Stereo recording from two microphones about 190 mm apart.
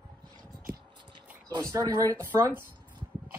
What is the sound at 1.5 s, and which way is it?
Speech, 20° right (ahead or behind).